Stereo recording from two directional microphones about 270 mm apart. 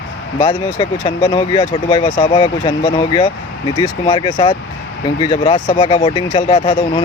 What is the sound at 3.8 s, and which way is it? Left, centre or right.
Speech, centre.